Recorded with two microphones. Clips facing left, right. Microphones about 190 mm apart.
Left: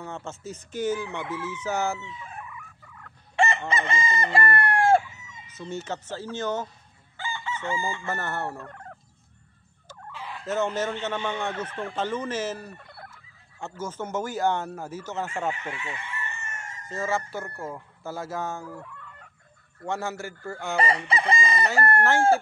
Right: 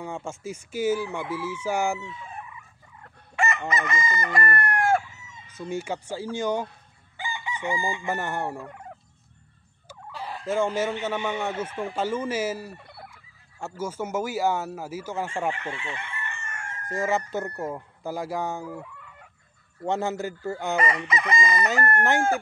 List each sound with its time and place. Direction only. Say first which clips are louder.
0.0 s speech: right 3 dB; 10° right (ahead or behind)
3.3 s chicken: left 2 dB; 30° left (ahead or behind)
5.6 s speech: right 3 dB; 10° right (ahead or behind)
7.2 s chicken: even; 15° right (ahead or behind)
10.1 s chicken: right 4 dB; 40° right (ahead or behind)
10.4 s speech: right 2 dB; 10° right (ahead or behind)
15.7 s chicken: right 1 dB; 30° right (ahead or behind)
16.0 s chicken: even; 55° right (ahead or behind)
16.8 s speech: right 3 dB; 15° right (ahead or behind)
20.7 s chicken: left 2 dB; 30° left (ahead or behind)